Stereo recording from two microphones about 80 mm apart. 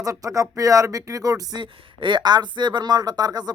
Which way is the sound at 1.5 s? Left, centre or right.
Right.